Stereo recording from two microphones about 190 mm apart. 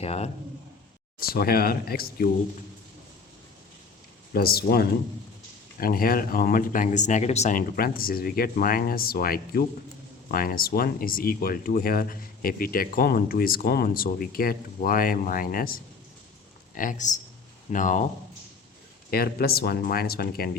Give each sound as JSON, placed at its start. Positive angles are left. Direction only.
{"t": 0.0, "sound": "speech", "side_deg": 30}
{"t": 1.2, "sound": "speech", "side_deg": 50}
{"t": 4.4, "sound": "speech", "side_deg": 55}
{"t": 7.8, "sound": "speech", "side_deg": 50}
{"t": 19.1, "sound": "speech", "side_deg": 55}